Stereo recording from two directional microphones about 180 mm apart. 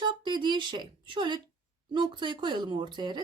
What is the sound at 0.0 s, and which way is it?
Speech, 25° right (ahead or behind).